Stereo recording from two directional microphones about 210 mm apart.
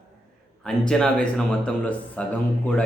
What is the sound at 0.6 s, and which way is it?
Speech, 5° left (ahead or behind).